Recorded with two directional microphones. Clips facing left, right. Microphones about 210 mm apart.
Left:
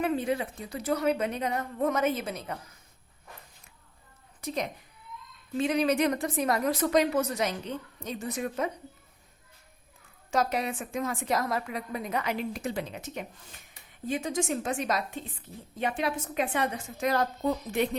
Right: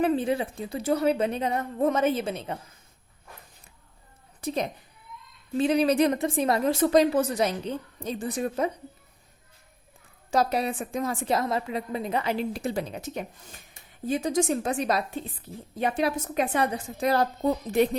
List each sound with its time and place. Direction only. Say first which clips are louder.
0.0 s a woman's voice: right 4 dB; 30° right (ahead or behind)
4.4 s a woman's voice: right 4 dB; 30° right (ahead or behind)
10.3 s a woman's voice: right 3 dB; 35° right (ahead or behind)